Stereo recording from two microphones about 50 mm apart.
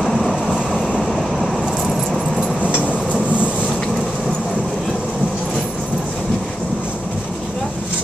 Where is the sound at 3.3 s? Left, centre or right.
Right.